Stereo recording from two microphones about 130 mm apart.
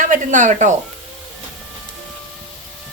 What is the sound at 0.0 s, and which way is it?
Speech, 80° right.